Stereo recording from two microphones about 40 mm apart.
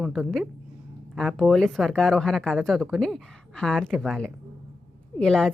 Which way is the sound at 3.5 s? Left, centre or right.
Centre.